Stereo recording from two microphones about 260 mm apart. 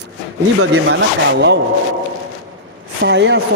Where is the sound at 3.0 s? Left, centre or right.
Right.